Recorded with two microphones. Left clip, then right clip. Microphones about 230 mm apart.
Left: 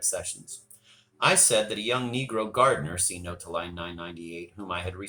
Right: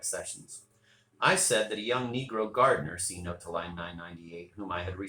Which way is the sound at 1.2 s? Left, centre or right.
Left.